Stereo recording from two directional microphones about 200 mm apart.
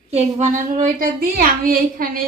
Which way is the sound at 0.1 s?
35° right (ahead or behind).